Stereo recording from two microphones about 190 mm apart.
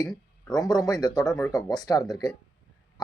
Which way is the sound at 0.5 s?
20° left (ahead or behind).